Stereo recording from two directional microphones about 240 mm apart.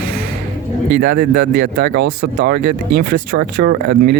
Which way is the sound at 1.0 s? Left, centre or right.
Right.